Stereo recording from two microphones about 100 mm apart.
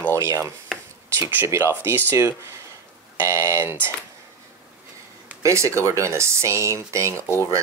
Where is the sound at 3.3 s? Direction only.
30° right (ahead or behind).